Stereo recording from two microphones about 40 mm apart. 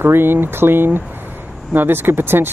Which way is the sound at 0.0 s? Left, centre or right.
Right.